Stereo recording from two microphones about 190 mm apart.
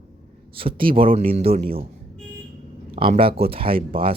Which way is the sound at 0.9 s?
30° right (ahead or behind).